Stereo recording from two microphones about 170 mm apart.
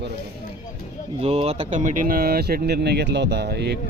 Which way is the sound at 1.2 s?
35° right (ahead or behind).